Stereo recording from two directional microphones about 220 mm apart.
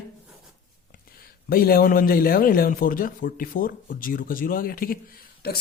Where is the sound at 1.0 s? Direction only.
40° left (ahead or behind).